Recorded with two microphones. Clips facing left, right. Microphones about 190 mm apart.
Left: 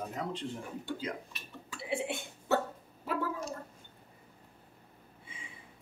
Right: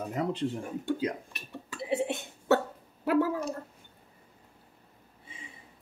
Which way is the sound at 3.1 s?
65° right (ahead or behind).